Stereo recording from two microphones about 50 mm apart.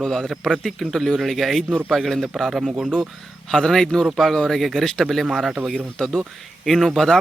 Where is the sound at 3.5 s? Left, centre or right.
Centre.